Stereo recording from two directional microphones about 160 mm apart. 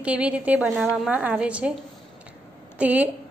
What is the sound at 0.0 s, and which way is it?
A woman's voice, 10° right (ahead or behind).